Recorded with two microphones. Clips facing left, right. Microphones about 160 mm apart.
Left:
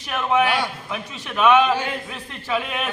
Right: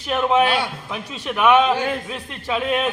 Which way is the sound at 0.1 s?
20° right (ahead or behind).